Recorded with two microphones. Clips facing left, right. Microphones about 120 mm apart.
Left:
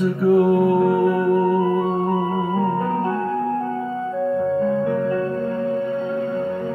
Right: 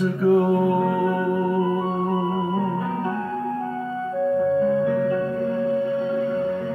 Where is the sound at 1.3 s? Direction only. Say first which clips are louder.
Left 4 dB; 60° left (ahead or behind).